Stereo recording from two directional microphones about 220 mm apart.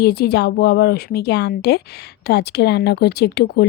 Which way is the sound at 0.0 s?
45° left (ahead or behind).